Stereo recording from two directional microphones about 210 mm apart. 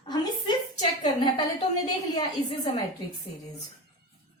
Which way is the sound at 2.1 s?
20° left (ahead or behind).